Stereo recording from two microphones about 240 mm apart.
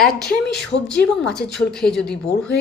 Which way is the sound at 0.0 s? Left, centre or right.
Centre.